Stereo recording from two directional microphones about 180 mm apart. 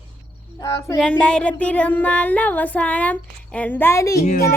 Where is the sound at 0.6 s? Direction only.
15° left (ahead or behind).